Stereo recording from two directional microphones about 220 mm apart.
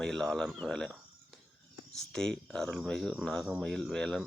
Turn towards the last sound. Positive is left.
turn(degrees=0)  # may be behind; listen again after turning